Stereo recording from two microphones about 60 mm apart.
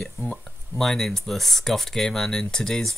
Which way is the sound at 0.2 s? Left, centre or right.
Left.